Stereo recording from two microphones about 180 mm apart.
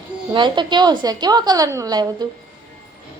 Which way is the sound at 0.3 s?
25° right (ahead or behind).